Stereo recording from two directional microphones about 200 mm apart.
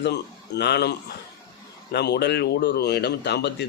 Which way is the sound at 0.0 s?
55° left (ahead or behind).